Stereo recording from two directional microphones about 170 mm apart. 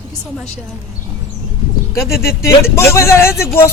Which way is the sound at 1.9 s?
15° left (ahead or behind).